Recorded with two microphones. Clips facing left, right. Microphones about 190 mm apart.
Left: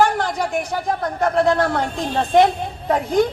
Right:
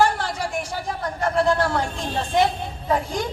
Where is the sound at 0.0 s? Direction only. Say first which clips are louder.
Left 3 dB; 55° left (ahead or behind).